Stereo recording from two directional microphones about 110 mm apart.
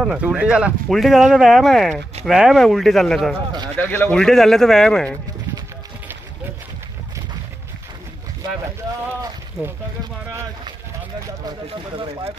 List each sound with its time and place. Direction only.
0.0 s speech: 10° right (ahead or behind)
3.7 s a man's voice: 15° left (ahead or behind)
4.2 s speech: 5° left (ahead or behind)